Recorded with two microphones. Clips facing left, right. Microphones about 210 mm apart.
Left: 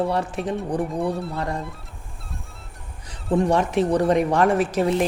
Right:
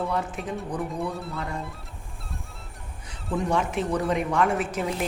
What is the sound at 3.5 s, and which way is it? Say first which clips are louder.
Speech: left 3 dB; 35° left (ahead or behind).